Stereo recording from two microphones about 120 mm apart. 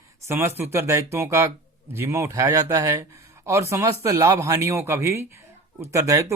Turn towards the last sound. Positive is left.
turn(degrees=-25)  # may be behind; listen again after turning